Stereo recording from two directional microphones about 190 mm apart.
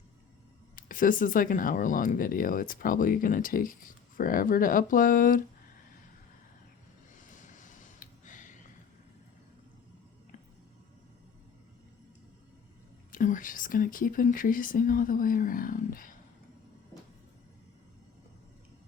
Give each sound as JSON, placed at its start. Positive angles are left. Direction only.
{"t": 0.8, "sound": "speech", "side_deg": 45}
{"t": 7.2, "sound": "a sound", "side_deg": 40}
{"t": 13.1, "sound": "speech", "side_deg": 45}